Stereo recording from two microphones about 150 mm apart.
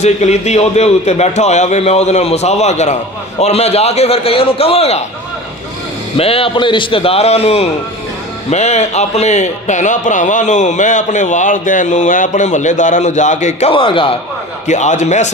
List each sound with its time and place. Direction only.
0.0 s a man's voice: 50° left (ahead or behind)
6.1 s a man's voice: 40° left (ahead or behind)
14.7 s a man's voice: 50° left (ahead or behind)